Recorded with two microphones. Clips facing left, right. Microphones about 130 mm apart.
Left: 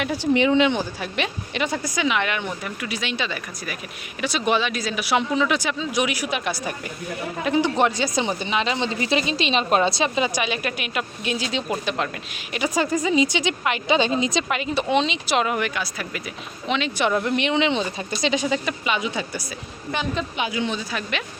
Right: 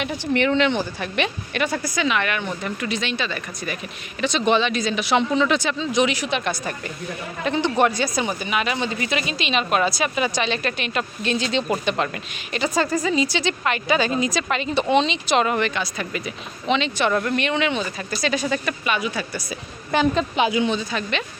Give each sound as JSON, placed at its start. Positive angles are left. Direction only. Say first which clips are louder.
{"t": 0.0, "sound": "a woman's voice", "louder": "left 2 dB", "side_deg": 10}
{"t": 12.5, "sound": "a woman's voice", "louder": "right 1 dB", "side_deg": 10}
{"t": 14.5, "sound": "a woman's voice", "louder": "right 4 dB", "side_deg": 5}
{"t": 20.1, "sound": "a woman's voice", "louder": "right 6 dB", "side_deg": -30}
{"t": 20.7, "sound": "speech", "louder": "right 3 dB", "side_deg": 5}